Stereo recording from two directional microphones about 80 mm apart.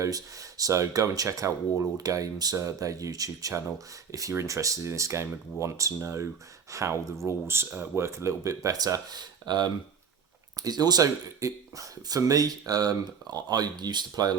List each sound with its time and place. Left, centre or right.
0.0 s speech: right